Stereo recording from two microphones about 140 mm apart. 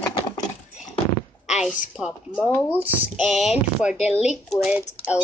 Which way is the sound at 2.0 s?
5° right (ahead or behind).